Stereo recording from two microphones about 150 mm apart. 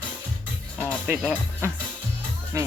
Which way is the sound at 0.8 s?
10° right (ahead or behind).